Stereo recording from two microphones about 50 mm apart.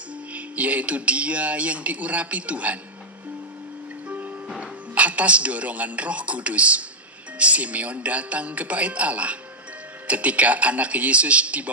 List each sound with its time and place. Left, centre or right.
0.3 s speech: right
4.9 s speech: right